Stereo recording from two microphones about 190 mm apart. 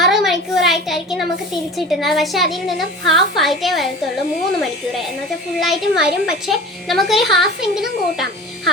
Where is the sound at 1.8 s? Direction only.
Centre (ahead or behind).